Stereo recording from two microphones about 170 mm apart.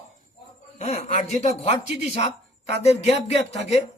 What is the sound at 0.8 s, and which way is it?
Speech, 40° left (ahead or behind).